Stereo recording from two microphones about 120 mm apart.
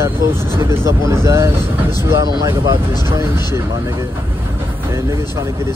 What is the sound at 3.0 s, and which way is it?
Speech, 20° right (ahead or behind).